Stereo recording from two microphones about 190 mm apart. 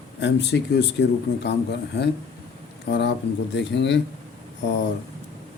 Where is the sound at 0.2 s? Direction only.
70° left (ahead or behind).